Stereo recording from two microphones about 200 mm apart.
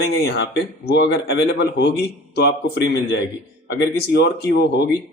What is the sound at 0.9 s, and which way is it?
Speech, 65° left (ahead or behind).